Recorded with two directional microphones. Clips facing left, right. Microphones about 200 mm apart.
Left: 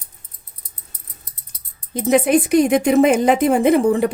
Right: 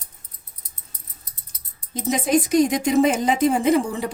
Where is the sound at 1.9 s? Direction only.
60° left (ahead or behind).